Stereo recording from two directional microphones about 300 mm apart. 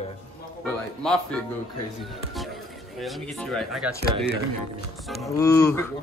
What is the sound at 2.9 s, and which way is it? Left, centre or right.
Speech, centre.